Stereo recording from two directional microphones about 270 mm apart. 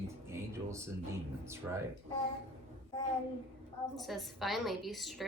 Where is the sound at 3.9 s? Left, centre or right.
Centre.